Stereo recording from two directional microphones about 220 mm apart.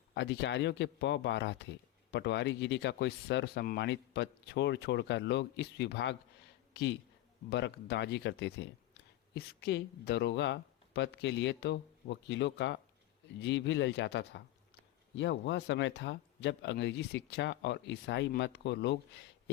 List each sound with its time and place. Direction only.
0.1 s speech: 50° left (ahead or behind)